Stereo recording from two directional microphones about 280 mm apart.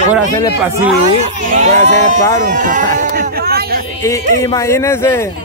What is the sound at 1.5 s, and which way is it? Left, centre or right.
Speech, right.